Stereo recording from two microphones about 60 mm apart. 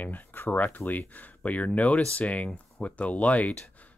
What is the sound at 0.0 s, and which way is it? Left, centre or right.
Speech, left.